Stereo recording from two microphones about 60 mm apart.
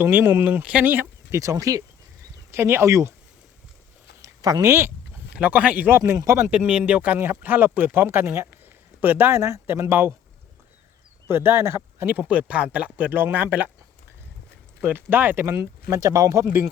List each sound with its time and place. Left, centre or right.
0.0 s speech: right
0.6 s speech: right
1.4 s speech: right
2.5 s speech: right
4.2 s a sound: right
4.6 s speech: right
5.3 s speech: right
6.1 s speech: right
6.7 s speech: right
7.2 s speech: right
9.4 s speech: right
11.3 s speech: right
12.0 s speech: right
14.8 s speech: right